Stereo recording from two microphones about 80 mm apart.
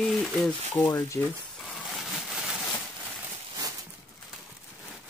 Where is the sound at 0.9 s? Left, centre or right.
Left.